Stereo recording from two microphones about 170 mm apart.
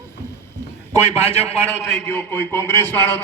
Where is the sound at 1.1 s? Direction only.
35° left (ahead or behind).